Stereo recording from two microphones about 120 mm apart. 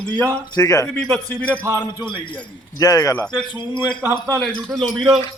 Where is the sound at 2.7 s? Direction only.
30° left (ahead or behind).